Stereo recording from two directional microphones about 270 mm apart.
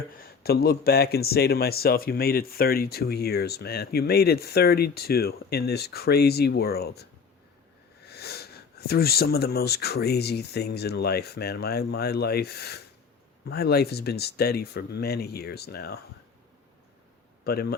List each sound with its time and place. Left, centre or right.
0.2 s speech: left
8.0 s a sound: left
8.9 s speech: left
17.4 s speech: left